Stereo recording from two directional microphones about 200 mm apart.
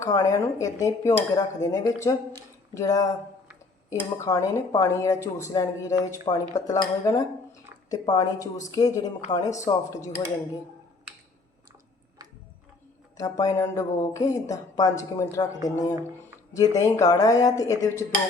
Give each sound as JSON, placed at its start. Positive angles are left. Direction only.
{"t": 0.0, "sound": "speech", "side_deg": 15}
{"t": 13.1, "sound": "speech", "side_deg": 20}